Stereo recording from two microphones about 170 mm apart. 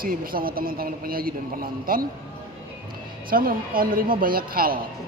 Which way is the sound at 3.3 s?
55° right (ahead or behind).